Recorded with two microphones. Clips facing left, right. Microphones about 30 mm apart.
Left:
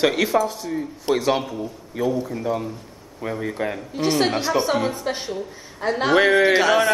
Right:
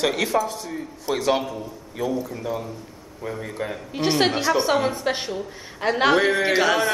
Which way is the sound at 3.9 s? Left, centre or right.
Right.